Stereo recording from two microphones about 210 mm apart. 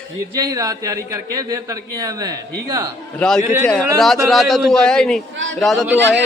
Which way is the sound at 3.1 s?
5° left (ahead or behind).